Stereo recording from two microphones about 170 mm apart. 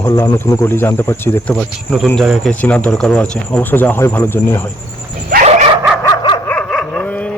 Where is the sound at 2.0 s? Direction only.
Centre (ahead or behind).